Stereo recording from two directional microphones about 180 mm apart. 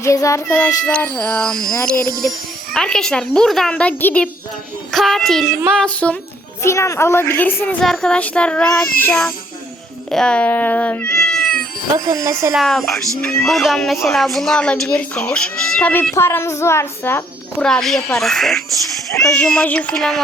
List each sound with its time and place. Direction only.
0.0 s a woman's voice: 15° left (ahead or behind)
11.9 s speech: 20° right (ahead or behind)
12.5 s a woman's voice: centre (ahead or behind)